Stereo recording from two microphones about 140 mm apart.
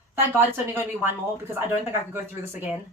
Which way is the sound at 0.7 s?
15° right (ahead or behind).